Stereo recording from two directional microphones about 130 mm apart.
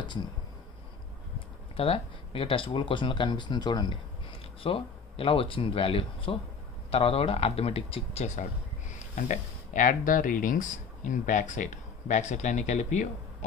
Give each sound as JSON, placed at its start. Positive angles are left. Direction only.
{"t": 1.8, "sound": "speech", "side_deg": 45}
{"t": 4.6, "sound": "speech", "side_deg": 45}